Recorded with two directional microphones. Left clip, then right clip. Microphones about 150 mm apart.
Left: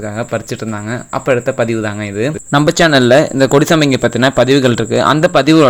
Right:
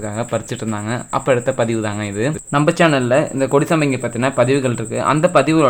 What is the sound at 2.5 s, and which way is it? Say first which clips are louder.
Speech: left 4 dB; 35° left (ahead or behind).